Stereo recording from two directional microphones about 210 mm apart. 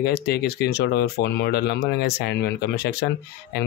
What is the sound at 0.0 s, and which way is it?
Speech, 50° left (ahead or behind).